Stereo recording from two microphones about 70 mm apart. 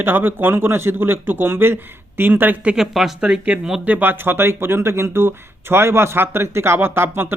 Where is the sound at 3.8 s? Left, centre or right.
Right.